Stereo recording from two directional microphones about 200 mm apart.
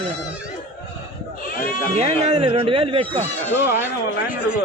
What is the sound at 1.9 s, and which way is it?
Speech, 30° right (ahead or behind).